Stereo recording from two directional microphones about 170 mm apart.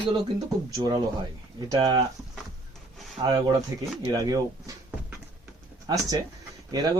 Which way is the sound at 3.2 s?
30° right (ahead or behind).